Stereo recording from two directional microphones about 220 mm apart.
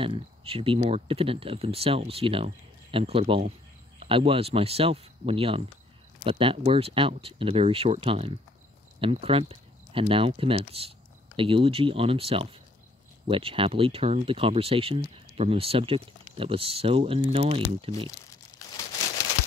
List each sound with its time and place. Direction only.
0.0 s speech: 25° right (ahead or behind)